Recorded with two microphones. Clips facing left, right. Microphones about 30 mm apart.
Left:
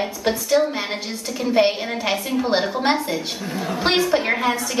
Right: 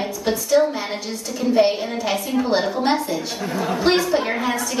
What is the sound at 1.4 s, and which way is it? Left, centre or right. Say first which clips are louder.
A woman's voice: right 1 dB; left.